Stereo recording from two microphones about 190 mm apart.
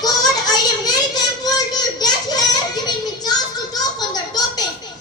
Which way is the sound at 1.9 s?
20° left (ahead or behind).